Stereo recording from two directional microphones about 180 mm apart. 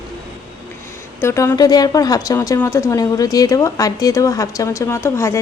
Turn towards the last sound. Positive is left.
turn(degrees=15)  # may be behind; listen again after turning